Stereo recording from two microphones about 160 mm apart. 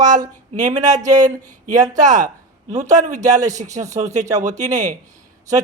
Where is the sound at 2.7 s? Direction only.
50° right (ahead or behind).